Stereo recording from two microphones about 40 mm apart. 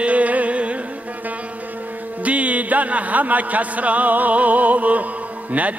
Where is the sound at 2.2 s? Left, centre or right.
Right.